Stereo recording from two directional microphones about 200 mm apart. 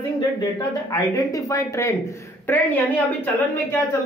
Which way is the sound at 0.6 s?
15° left (ahead or behind).